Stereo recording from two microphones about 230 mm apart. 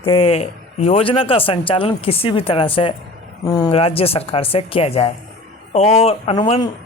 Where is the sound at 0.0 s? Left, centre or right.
Left.